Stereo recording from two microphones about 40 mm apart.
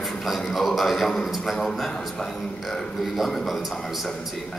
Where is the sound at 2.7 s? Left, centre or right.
Centre.